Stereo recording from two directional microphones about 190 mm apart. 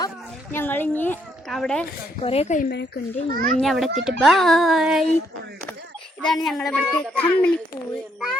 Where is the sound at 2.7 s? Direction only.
60° left (ahead or behind).